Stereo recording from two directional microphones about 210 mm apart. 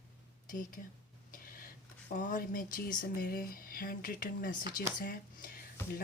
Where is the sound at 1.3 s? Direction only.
40° left (ahead or behind).